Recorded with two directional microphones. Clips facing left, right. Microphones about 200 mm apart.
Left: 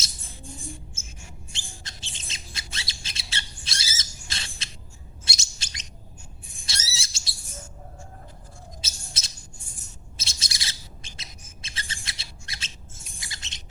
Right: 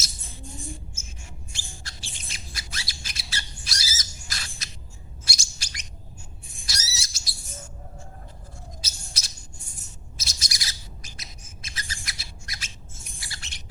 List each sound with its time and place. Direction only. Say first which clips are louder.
1.5 s squawk: even; 20° left (ahead or behind)
5.2 s bird: even; 25° left (ahead or behind)
8.8 s bird: even; 25° left (ahead or behind)
13.1 s squawk: left 1 dB; 20° left (ahead or behind)